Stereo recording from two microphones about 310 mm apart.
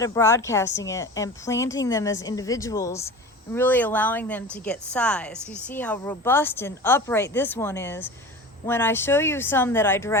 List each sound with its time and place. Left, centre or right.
0.0 s a woman's voice: centre